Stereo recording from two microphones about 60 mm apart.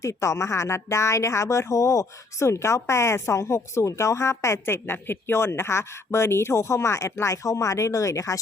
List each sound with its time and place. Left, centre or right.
0.0 s speech: left